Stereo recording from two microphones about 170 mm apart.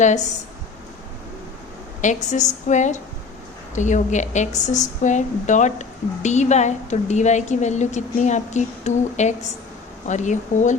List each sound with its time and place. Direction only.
0.0 s a woman's voice: 45° left (ahead or behind)
2.0 s a woman's voice: 45° left (ahead or behind)